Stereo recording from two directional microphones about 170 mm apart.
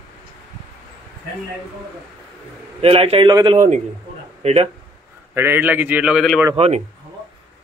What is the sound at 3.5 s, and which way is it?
A man's voice, 45° right (ahead or behind).